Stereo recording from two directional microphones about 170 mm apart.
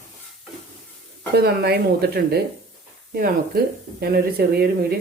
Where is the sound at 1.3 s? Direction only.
70° right (ahead or behind).